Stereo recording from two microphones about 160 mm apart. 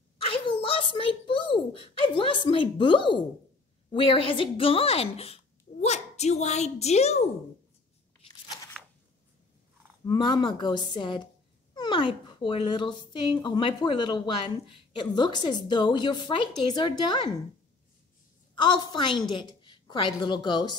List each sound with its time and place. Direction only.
0.2 s a sound: 35° left (ahead or behind)
3.9 s a woman's voice: 35° left (ahead or behind)
8.8 s shuffling cards: 5° left (ahead or behind)
10.0 s speech: 30° left (ahead or behind)
18.5 s speech: 30° left (ahead or behind)